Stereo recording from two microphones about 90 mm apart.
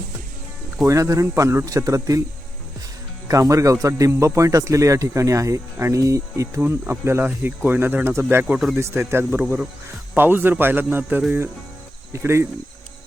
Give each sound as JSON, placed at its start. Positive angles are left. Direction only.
{"t": 0.9, "sound": "a man's voice", "side_deg": -35}
{"t": 3.2, "sound": "a man's voice", "side_deg": -35}
{"t": 7.0, "sound": "speech", "side_deg": -25}